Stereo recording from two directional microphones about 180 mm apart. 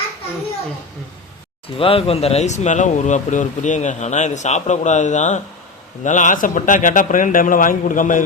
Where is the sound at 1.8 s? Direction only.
30° left (ahead or behind).